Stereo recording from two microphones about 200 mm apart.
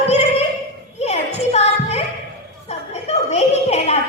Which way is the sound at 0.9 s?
35° left (ahead or behind).